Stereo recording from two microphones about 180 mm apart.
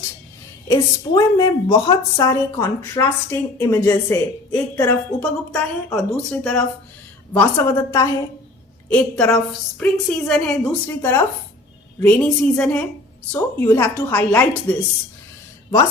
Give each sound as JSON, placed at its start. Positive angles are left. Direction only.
{"t": 0.7, "sound": "a woman's voice", "side_deg": 20}
{"t": 6.0, "sound": "a woman's voice", "side_deg": 5}